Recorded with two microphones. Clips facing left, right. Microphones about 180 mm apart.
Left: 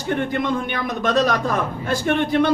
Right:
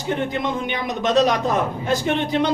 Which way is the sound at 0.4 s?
20° right (ahead or behind).